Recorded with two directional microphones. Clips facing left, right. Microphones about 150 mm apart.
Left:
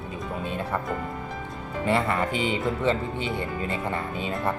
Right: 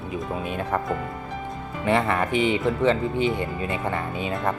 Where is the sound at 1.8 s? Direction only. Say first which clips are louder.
Right 2 dB; 20° right (ahead or behind).